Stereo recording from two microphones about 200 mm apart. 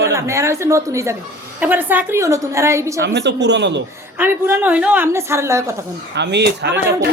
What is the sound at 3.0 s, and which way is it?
Speech, 60° right (ahead or behind).